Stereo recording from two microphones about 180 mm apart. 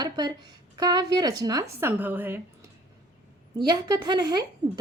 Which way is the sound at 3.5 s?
25° right (ahead or behind).